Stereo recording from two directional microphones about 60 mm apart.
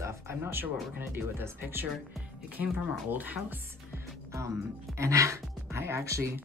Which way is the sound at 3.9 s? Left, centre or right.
Right.